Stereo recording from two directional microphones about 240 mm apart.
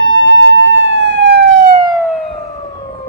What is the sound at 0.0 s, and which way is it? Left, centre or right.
Emergency vehicle, right.